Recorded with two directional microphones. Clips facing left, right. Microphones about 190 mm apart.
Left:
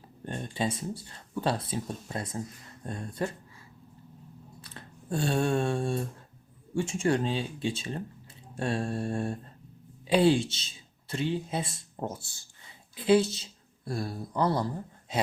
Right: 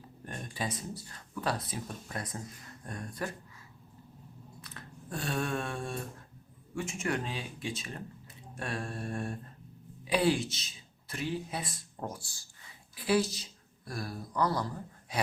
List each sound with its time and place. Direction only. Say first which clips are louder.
0.3 s speech: left 6 dB; 25° left (ahead or behind)
4.6 s a sound: left 1 dB; 30° left (ahead or behind)
6.7 s speech: left 7 dB; 30° left (ahead or behind)